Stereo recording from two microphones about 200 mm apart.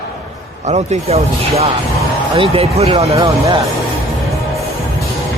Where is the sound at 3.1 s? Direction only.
15° right (ahead or behind).